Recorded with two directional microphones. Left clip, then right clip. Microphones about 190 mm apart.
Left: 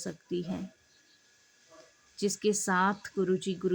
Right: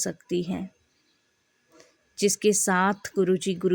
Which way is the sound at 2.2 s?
35° right (ahead or behind).